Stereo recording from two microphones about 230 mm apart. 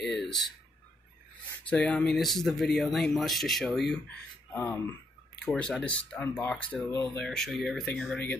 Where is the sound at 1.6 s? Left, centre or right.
Centre.